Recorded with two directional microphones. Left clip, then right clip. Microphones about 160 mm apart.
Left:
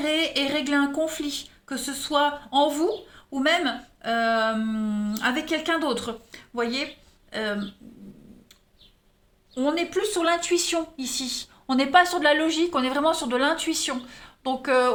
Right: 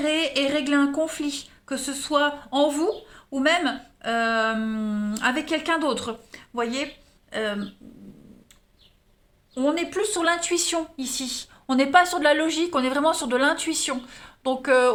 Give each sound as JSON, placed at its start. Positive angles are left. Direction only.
{"t": 0.0, "sound": "a woman's voice", "side_deg": -20}
{"t": 9.6, "sound": "speech", "side_deg": -20}